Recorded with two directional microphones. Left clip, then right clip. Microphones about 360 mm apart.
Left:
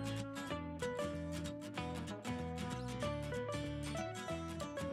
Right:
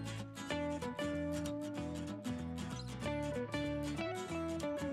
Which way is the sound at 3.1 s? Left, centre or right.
Centre.